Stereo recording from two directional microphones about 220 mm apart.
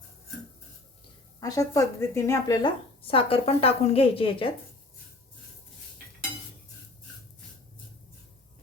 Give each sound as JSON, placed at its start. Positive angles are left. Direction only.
{"t": 1.4, "sound": "a woman's voice", "side_deg": 15}